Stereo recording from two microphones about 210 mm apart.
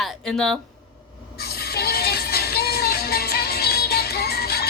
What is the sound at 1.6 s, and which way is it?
Music, 50° left (ahead or behind).